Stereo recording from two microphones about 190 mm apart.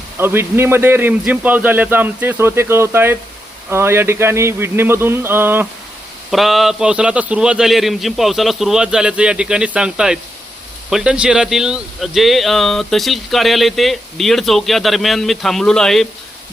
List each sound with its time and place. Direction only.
0.2 s a man's voice: 10° right (ahead or behind)